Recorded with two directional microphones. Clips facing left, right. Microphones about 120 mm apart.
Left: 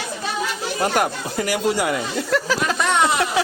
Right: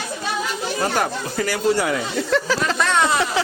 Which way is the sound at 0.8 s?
10° left (ahead or behind).